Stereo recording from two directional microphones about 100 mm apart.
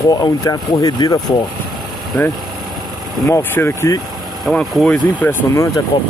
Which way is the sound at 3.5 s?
25° left (ahead or behind).